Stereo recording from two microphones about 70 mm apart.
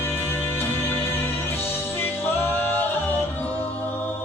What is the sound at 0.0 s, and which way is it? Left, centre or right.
Music, left.